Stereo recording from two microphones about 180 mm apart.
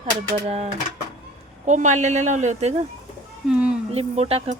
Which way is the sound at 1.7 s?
40° right (ahead or behind).